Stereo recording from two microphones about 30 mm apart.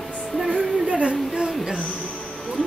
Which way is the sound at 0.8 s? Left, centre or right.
Right.